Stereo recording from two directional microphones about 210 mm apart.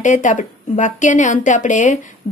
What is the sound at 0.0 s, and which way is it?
A woman's voice, 35° left (ahead or behind).